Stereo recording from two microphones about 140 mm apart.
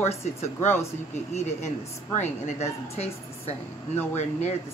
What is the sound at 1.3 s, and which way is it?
Speech, 55° left (ahead or behind).